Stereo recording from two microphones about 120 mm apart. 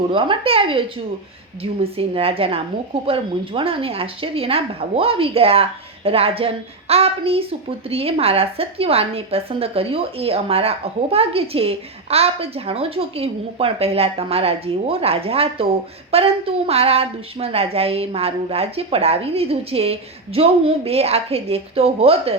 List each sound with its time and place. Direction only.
0.1 s a woman's voice: 45° right (ahead or behind)